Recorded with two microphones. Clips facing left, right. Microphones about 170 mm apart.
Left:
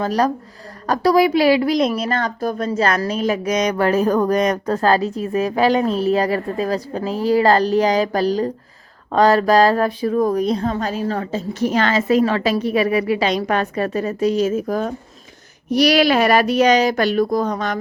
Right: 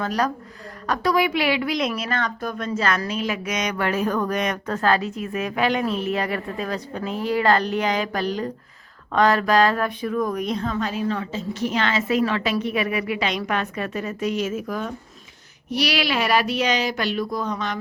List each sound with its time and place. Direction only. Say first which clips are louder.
0.0 s a woman's voice: left 5 dB; 35° left (ahead or behind)